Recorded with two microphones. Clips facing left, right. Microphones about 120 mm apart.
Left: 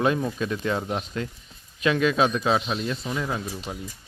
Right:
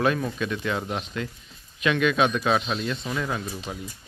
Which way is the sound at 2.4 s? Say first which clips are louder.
Even; 20° left (ahead or behind).